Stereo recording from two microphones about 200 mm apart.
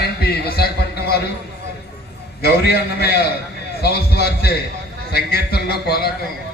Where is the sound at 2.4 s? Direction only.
50° left (ahead or behind).